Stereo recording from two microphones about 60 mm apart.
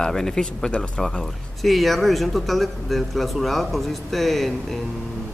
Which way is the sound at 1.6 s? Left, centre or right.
Centre.